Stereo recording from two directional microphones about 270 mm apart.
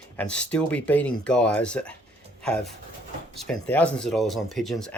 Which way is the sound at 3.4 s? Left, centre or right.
Centre.